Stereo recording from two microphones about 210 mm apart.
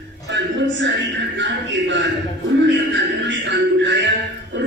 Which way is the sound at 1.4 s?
60° right (ahead or behind).